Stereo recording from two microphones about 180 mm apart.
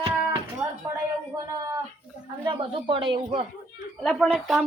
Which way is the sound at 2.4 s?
30° right (ahead or behind).